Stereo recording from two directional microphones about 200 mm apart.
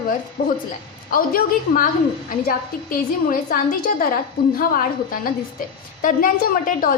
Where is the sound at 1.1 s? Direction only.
45° left (ahead or behind).